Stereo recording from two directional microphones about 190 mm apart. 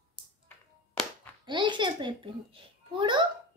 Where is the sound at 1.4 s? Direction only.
25° right (ahead or behind).